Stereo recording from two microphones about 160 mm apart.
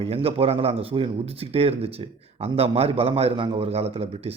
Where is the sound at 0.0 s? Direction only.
35° right (ahead or behind).